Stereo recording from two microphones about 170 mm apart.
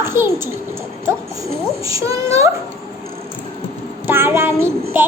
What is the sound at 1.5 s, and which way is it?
Child singing, 20° right (ahead or behind).